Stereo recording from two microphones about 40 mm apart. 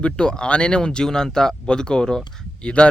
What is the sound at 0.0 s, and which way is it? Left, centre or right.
Speech, left.